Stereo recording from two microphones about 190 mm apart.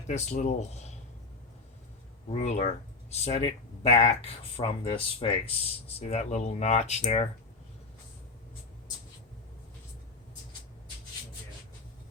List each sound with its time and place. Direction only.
0.1 s speech: 35° left (ahead or behind)
2.3 s speech: 35° left (ahead or behind)